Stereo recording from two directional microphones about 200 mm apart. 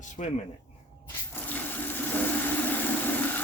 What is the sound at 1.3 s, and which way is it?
Water, 10° left (ahead or behind).